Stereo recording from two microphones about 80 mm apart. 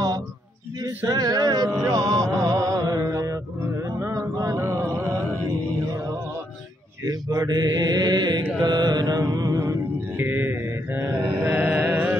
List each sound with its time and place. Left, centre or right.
0.8 s music: right
3.6 s a sound: right
7.1 s mantra: right
9.9 s mantra: right